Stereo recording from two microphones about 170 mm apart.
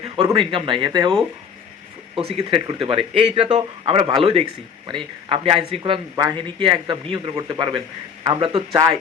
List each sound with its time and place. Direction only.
0.2 s speech: 30° right (ahead or behind)